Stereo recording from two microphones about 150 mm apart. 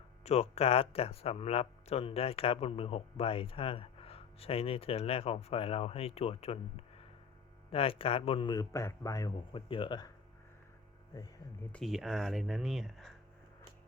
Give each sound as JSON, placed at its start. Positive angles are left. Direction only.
{"t": 0.3, "sound": "speech", "side_deg": 45}
{"t": 9.6, "sound": "speech", "side_deg": 35}
{"t": 11.7, "sound": "speech", "side_deg": 0}